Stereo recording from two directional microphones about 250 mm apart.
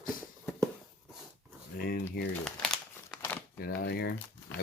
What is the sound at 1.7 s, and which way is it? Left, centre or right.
Speech, left.